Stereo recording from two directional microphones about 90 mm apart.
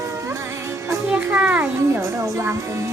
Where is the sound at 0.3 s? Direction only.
30° right (ahead or behind).